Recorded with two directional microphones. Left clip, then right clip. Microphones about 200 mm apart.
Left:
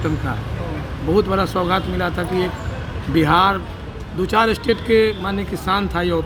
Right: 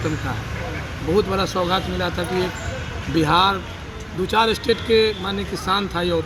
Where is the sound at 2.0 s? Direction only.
30° left (ahead or behind).